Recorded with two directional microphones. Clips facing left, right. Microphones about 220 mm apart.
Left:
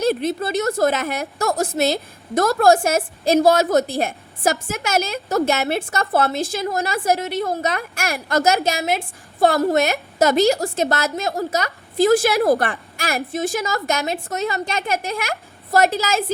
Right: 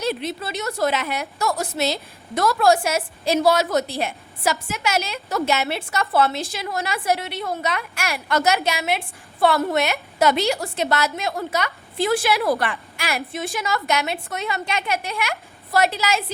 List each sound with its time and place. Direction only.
0.0 s a woman's voice: 50° left (ahead or behind)